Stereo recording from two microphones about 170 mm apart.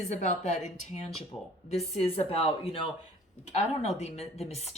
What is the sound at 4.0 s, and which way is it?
Speech, 40° left (ahead or behind).